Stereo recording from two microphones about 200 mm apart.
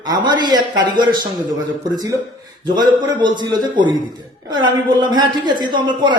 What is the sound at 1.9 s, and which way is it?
A man's voice, 20° right (ahead or behind).